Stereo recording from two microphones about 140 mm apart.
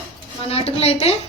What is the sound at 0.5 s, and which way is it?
Speech, 45° left (ahead or behind).